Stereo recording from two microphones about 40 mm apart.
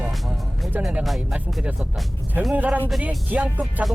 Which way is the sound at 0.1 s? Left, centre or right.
Centre.